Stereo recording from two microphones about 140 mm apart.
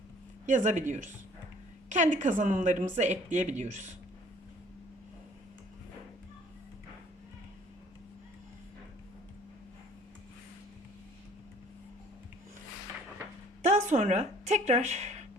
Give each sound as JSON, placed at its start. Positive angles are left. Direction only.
{"t": 0.4, "sound": "a woman's voice", "side_deg": -65}
{"t": 13.6, "sound": "speech", "side_deg": -55}